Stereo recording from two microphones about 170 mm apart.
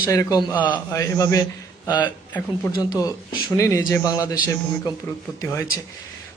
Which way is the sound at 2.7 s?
20° left (ahead or behind).